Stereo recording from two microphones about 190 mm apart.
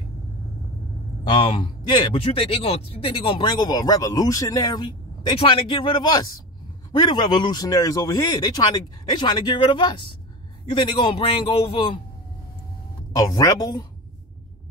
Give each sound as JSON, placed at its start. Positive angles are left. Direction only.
{"t": 1.2, "sound": "a man's voice", "side_deg": 25}
{"t": 13.1, "sound": "a man's voice", "side_deg": 20}